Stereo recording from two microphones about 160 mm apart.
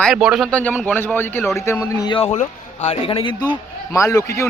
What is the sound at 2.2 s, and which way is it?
A man's voice, 40° left (ahead or behind).